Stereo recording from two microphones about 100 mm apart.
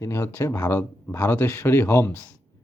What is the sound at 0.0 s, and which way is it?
Speech, 30° left (ahead or behind).